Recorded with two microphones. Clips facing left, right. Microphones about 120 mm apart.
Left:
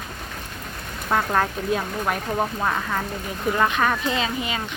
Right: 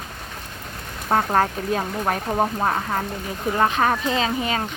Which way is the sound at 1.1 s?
35° right (ahead or behind).